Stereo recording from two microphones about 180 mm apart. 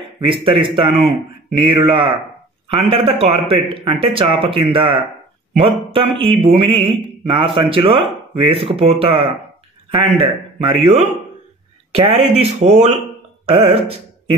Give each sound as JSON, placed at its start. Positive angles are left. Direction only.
{"t": 0.2, "sound": "a man's voice", "side_deg": -30}
{"t": 11.9, "sound": "a man's voice", "side_deg": -35}